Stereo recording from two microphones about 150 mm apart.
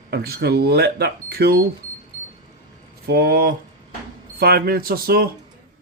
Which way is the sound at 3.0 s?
90° right.